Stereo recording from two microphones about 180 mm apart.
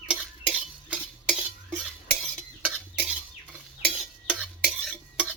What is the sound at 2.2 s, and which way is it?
Stir, 5° right (ahead or behind).